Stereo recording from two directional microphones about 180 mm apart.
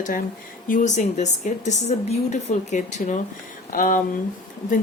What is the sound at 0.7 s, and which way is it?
Speech, 45° left (ahead or behind).